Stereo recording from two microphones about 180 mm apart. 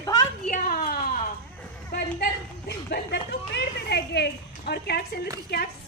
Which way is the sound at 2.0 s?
60° left (ahead or behind).